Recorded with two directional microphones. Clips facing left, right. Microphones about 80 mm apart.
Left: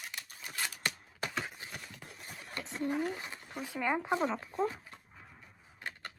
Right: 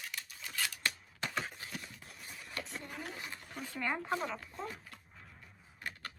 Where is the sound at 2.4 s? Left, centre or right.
Left.